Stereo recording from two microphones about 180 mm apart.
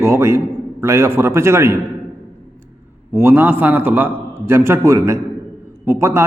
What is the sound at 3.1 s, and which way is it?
A man's voice, 10° right (ahead or behind).